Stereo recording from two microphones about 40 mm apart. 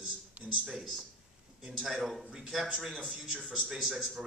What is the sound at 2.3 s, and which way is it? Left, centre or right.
Speech, centre.